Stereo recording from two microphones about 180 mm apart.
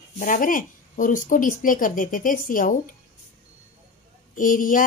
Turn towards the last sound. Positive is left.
turn(degrees=50)  # may be behind; listen again after turning